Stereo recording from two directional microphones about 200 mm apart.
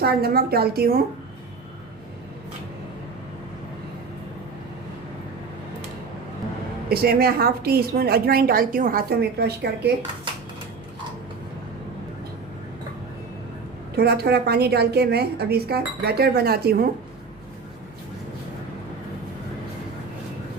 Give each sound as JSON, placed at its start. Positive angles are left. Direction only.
{"t": 0.0, "sound": "a woman's voice", "side_deg": -50}
{"t": 6.8, "sound": "a woman's voice", "side_deg": -50}
{"t": 13.9, "sound": "a woman's voice", "side_deg": -55}